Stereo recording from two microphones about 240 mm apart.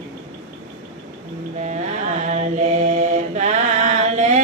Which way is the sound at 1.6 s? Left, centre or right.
Right.